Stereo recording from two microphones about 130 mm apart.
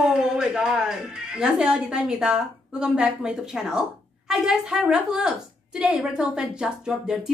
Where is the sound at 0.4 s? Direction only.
5° right (ahead or behind).